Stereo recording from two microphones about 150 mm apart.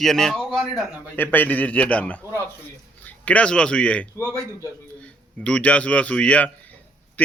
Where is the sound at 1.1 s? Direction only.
10° left (ahead or behind).